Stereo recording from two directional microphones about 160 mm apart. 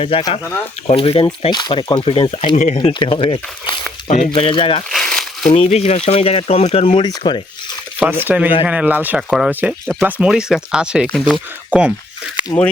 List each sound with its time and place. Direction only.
0.0 s speech: 30° left (ahead or behind); by 2.7 s 45° left (ahead or behind)
2.7 s speech: 35° left (ahead or behind)
4.9 s crumpling: 5° left (ahead or behind)
5.5 s speech: 40° left (ahead or behind)
8.2 s speech: 10° right (ahead or behind)